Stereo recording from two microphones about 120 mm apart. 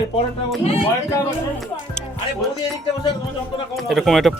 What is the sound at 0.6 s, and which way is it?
Speech, 65° left (ahead or behind).